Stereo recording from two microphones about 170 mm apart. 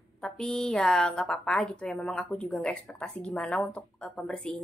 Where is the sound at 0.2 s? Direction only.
5° left (ahead or behind).